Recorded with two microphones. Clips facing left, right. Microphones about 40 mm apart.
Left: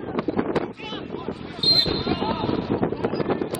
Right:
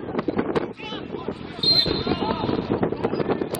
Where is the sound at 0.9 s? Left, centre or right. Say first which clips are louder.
Even; centre.